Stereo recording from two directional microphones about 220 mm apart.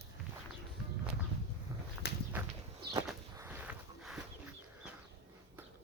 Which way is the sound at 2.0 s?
50° left (ahead or behind).